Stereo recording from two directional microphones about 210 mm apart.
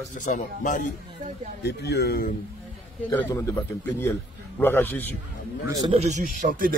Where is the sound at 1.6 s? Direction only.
50° left (ahead or behind).